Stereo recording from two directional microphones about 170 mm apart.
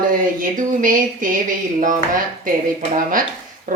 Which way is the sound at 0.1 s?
50° right (ahead or behind).